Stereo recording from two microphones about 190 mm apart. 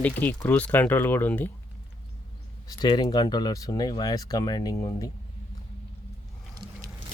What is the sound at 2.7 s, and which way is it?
Speech, 20° left (ahead or behind).